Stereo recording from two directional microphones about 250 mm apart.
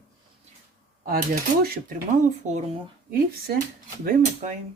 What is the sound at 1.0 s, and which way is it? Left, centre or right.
Speech, right.